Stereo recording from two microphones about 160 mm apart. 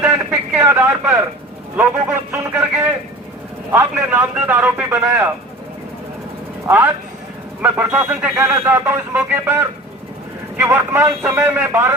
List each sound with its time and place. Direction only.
0.0 s a sound: 10° right (ahead or behind)
0.6 s speech: 15° right (ahead or behind)
6.7 s speech: 15° right (ahead or behind)